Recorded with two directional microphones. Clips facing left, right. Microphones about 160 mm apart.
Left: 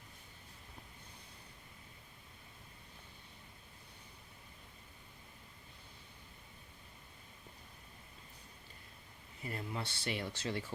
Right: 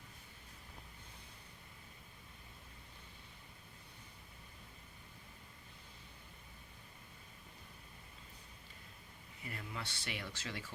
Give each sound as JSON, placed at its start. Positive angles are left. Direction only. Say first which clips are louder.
{"t": 9.4, "sound": "speech", "louder": "left 5 dB", "side_deg": 30}